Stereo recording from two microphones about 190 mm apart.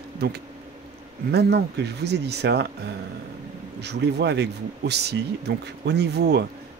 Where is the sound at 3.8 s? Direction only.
60° right (ahead or behind).